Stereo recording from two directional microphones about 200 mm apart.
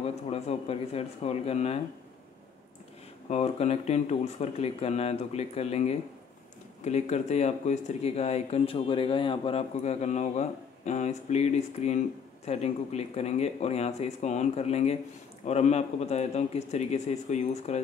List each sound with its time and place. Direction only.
0.0 s speech: 30° left (ahead or behind)
3.3 s speech: 30° left (ahead or behind)